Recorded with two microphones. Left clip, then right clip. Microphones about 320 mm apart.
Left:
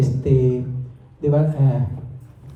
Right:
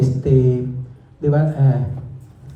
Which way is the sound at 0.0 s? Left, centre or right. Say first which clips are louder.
Right 2 dB; right.